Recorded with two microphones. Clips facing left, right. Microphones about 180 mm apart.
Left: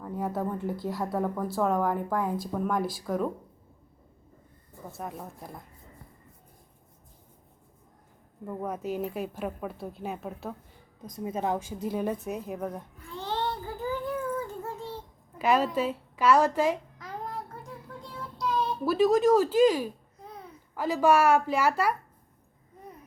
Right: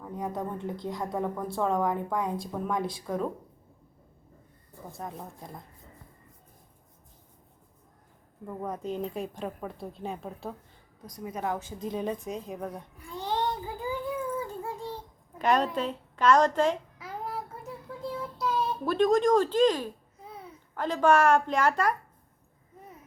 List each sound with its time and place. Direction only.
0.0 s a woman's voice: 5° left (ahead or behind)
4.9 s a woman's voice: 5° left (ahead or behind)
8.4 s a woman's voice: 5° left (ahead or behind)
11.0 s a woman's voice: 25° left (ahead or behind)
11.6 s a woman's voice: 10° left (ahead or behind)
12.7 s babbling: 10° right (ahead or behind)
14.3 s a sound: 10° right (ahead or behind)
15.4 s a woman's voice: 5° left (ahead or behind)
17.0 s child singing: 5° right (ahead or behind); by 19.9 s 10° left (ahead or behind)
20.2 s babbling: 5° right (ahead or behind)
20.7 s a woman's voice: 10° left (ahead or behind)